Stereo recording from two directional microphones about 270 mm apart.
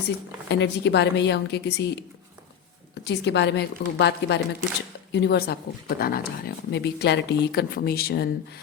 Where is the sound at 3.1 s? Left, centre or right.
Left.